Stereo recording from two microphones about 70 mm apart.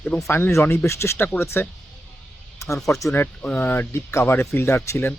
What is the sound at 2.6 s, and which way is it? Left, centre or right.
Speech, left.